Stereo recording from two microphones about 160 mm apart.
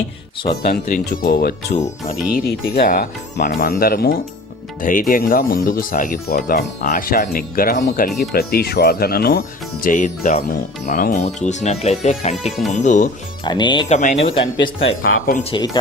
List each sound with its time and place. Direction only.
0.6 s speech: 65° left (ahead or behind)
1.7 s speech: 45° left (ahead or behind)
2.5 s speech: 85° left
4.8 s speech: 55° left (ahead or behind)
8.2 s speech: 75° left (ahead or behind)
9.8 s speech: 55° left (ahead or behind)
12.4 s speech: centre (ahead or behind)
12.7 s speech: 50° left (ahead or behind)
13.4 s speech: 30° left (ahead or behind)
13.8 s speech: 45° left (ahead or behind)
14.3 s speech: 30° left (ahead or behind)